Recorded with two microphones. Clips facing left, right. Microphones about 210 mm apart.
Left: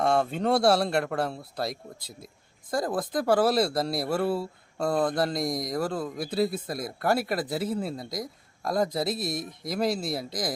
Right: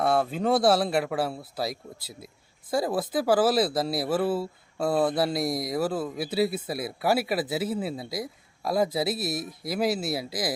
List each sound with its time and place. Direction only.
0.0 s speech: 5° right (ahead or behind)